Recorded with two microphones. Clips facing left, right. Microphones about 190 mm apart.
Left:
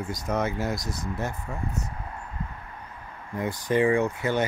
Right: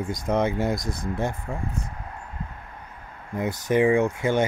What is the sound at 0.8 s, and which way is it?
Speech, 55° right (ahead or behind).